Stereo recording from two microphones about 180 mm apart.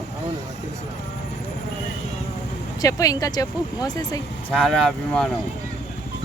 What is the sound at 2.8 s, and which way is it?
Speech, 20° left (ahead or behind).